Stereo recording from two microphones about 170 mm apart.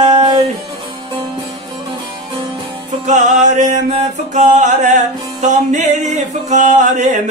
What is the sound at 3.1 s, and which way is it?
Music, 45° right (ahead or behind).